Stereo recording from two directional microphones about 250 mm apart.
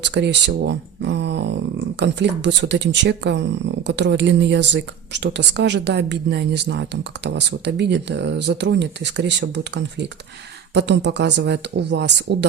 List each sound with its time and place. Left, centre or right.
0.0 s speech: right